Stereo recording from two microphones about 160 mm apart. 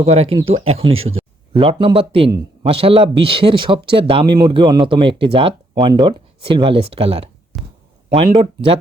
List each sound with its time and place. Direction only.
0.0 s speech: 40° right (ahead or behind)